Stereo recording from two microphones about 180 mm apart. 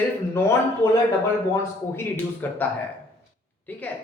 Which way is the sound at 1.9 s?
10° left (ahead or behind).